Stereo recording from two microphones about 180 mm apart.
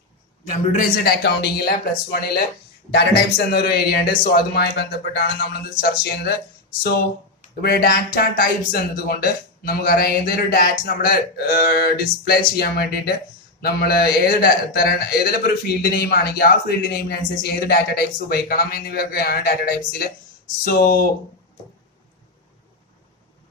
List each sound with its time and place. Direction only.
0.7 s a man's voice: 55° left (ahead or behind)
5.8 s a man's voice: 55° left (ahead or behind)
7.6 s a man's voice: 55° left (ahead or behind)